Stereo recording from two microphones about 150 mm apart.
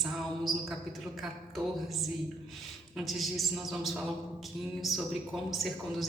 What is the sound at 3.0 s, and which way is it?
A woman's voice, centre (ahead or behind).